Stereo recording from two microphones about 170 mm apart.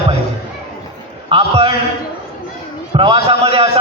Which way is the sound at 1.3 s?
35° right (ahead or behind).